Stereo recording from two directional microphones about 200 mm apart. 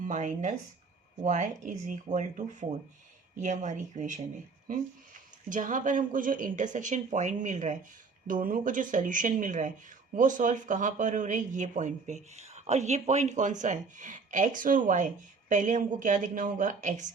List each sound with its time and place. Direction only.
0.0 s speech: 40° right (ahead or behind)
5.5 s speech: 40° right (ahead or behind)